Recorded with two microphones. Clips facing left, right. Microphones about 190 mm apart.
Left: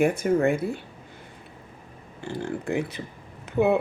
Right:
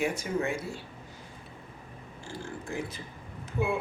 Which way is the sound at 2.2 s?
65° left (ahead or behind).